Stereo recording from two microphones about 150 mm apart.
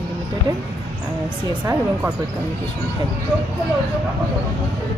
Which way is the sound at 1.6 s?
10° right (ahead or behind).